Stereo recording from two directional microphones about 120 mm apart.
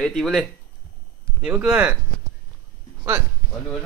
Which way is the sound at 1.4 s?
10° right (ahead or behind).